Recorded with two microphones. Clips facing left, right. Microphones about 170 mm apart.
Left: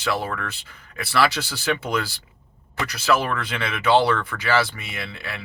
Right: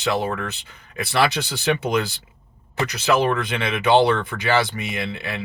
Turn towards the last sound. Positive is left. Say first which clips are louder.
# right 6 dB
turn(degrees=-20)  # may be behind; listen again after turning